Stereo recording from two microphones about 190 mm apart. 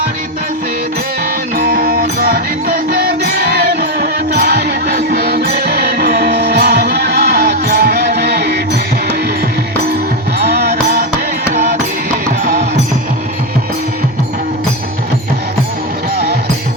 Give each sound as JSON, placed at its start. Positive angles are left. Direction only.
{"t": 1.5, "sound": "music", "side_deg": -50}
{"t": 10.4, "sound": "music", "side_deg": -60}